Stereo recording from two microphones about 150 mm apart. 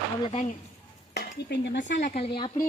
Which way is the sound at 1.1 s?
90° left.